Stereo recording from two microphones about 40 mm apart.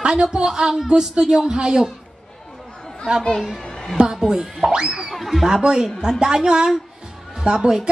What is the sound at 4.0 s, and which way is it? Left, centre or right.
A woman's voice, centre.